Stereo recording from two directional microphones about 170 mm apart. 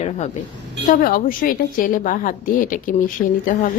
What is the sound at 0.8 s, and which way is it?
A woman's voice, 55° left (ahead or behind).